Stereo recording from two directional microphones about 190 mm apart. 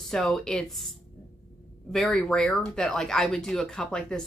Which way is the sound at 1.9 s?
5° left (ahead or behind).